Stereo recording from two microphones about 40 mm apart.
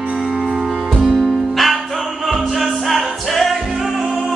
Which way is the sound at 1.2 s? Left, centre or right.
Centre.